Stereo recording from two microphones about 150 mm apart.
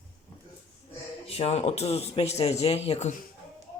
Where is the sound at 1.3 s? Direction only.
45° left (ahead or behind).